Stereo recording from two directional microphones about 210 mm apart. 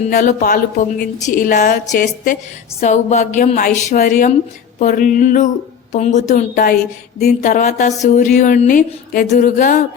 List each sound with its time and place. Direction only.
0.1 s speech: 40° left (ahead or behind)